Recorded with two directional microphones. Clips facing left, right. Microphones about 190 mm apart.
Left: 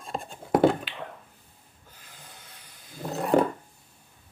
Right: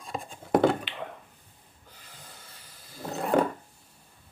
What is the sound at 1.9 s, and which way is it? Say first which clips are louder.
Snort: even; 10° left (ahead or behind).